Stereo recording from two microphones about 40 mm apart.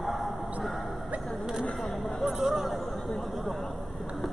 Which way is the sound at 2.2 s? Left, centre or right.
Centre.